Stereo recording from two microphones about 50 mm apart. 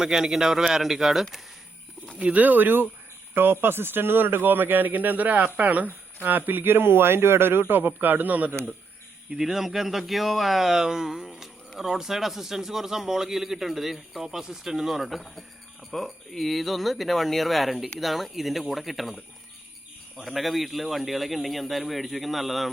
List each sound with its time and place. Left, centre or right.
0.0 s a man's voice: centre
2.1 s a man's voice: right
9.3 s speech: centre
20.2 s speech: centre